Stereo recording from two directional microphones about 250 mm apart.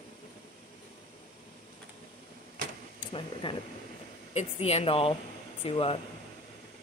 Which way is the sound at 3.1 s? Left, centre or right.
Centre.